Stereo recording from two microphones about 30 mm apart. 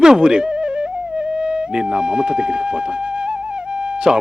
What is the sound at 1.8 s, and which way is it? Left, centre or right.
A woman's voice, right.